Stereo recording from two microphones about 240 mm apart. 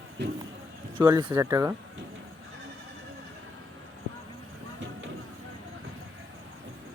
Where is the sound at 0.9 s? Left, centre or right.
Centre.